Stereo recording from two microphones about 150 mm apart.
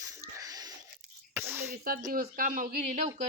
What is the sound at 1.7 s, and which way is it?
Speech, 75° right (ahead or behind).